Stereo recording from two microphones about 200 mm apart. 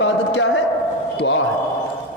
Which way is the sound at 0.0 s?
70° left (ahead or behind).